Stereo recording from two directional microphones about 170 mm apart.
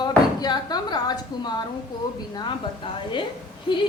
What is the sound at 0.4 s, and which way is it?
A woman's voice, 25° left (ahead or behind).